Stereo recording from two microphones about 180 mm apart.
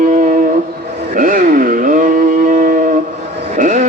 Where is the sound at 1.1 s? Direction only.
50° right (ahead or behind).